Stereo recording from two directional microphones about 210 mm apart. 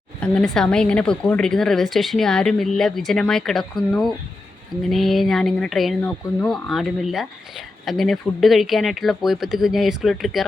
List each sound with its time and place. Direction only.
0.2 s speech: 5° left (ahead or behind)